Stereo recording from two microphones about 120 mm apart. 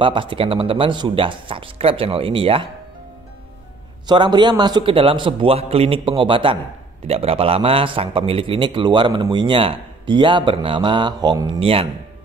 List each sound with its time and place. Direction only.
0.0 s a man's voice: 45° right (ahead or behind)
4.1 s a man's voice: 40° right (ahead or behind)
11.6 s a man's voice: 50° right (ahead or behind)